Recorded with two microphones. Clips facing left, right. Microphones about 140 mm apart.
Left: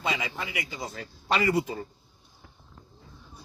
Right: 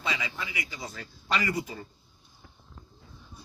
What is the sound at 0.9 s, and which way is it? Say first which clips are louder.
Speech: left 4 dB; 25° left (ahead or behind).